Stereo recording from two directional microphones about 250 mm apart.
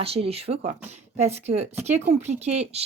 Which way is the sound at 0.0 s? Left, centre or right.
Right.